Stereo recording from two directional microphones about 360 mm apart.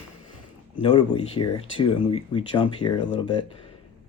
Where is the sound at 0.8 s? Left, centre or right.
Centre.